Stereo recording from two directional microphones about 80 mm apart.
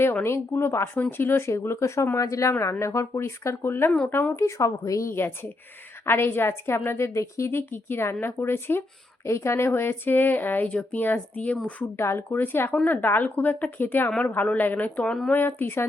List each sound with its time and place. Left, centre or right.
0.0 s a woman's voice: left
4.4 s a woman's voice: left; by 11.9 s centre
11.9 s a woman's voice: left